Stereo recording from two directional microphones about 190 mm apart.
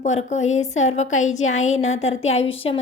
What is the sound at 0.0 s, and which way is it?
A woman's voice, 40° left (ahead or behind).